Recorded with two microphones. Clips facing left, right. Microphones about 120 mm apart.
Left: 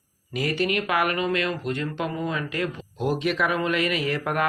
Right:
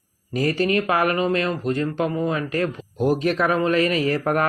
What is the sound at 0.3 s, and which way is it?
Speech, 35° right (ahead or behind).